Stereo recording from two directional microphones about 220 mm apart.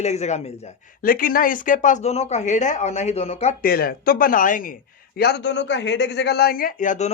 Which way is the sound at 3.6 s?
45° left (ahead or behind).